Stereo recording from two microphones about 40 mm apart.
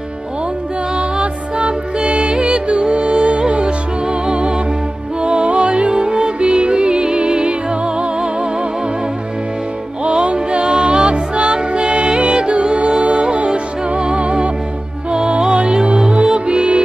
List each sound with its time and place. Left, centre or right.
0.9 s music: right
10.0 s music: right